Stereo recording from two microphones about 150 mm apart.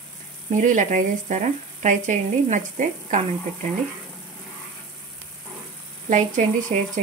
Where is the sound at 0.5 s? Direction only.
60° right (ahead or behind).